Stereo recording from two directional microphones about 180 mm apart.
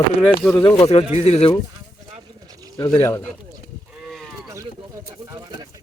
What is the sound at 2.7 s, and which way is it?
Speech, 25° left (ahead or behind).